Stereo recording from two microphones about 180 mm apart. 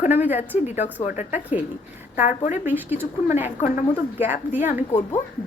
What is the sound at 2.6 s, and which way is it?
Speech, 10° right (ahead or behind).